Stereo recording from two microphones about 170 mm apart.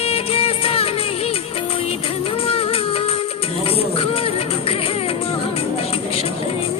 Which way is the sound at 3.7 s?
35° left (ahead or behind).